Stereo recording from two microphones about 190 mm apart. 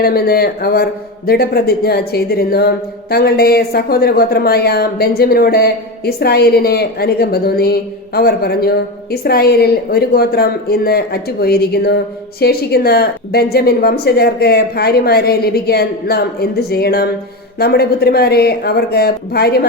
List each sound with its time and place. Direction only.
0.0 s speech: 55° left (ahead or behind)